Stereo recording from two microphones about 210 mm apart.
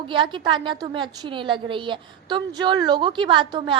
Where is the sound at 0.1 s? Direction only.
25° right (ahead or behind).